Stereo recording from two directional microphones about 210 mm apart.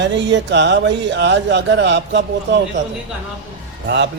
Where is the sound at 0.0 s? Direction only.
60° right (ahead or behind).